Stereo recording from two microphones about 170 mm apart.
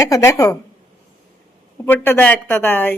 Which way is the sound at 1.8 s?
10° left (ahead or behind).